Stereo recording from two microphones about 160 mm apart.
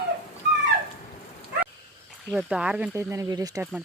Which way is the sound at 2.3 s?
5° right (ahead or behind).